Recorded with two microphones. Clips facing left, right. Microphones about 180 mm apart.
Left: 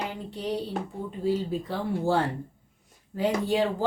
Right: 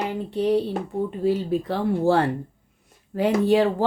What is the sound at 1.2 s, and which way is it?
Speech, 65° right (ahead or behind).